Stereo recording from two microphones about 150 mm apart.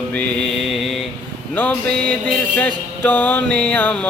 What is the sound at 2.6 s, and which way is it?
Speech, 10° left (ahead or behind).